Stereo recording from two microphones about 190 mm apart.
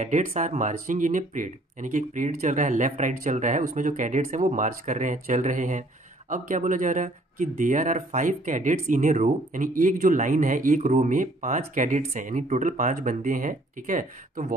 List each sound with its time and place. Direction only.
0.0 s speech: 40° right (ahead or behind)